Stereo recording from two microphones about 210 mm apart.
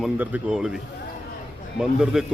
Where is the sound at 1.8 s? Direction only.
Centre (ahead or behind).